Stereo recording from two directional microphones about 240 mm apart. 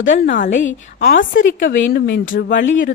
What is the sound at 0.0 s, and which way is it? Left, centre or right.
A woman's voice, left.